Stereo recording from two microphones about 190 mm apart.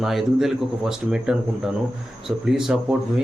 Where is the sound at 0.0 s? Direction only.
Centre (ahead or behind).